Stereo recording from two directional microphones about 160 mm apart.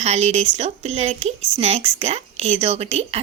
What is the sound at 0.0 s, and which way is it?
A woman's voice, 40° right (ahead or behind).